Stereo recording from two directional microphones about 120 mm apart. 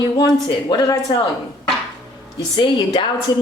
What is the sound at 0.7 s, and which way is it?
Speech, 35° left (ahead or behind).